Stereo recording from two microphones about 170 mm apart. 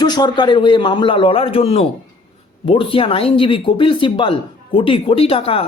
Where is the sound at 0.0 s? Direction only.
25° left (ahead or behind).